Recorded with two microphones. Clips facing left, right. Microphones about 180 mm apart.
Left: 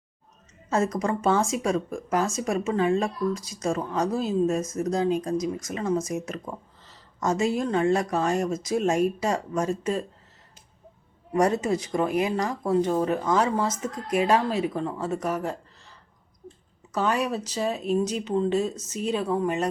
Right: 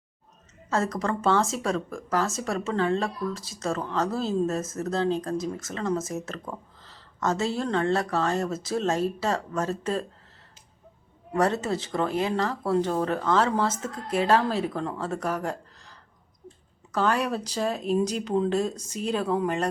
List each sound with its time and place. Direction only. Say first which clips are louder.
0.7 s speech: left 2 dB; 20° left (ahead or behind)
11.3 s speech: left 2 dB; 15° left (ahead or behind)